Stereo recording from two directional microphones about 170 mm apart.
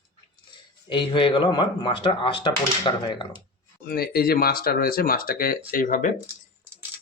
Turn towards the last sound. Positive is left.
turn(degrees=50)  # may be behind; listen again after turning